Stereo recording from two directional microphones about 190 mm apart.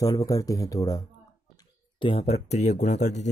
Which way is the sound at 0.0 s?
20° left (ahead or behind).